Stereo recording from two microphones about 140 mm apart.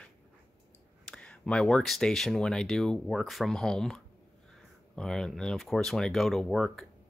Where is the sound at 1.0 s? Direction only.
5° left (ahead or behind).